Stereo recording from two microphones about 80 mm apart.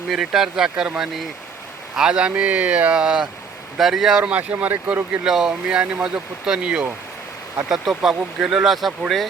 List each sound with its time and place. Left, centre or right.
0.1 s speech: centre
4.2 s speech: centre
5.1 s speech: centre